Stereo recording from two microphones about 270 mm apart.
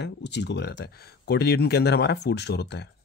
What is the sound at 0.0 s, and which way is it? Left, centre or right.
Speech, left.